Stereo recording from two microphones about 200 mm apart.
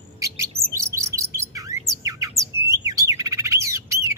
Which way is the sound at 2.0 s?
15° right (ahead or behind).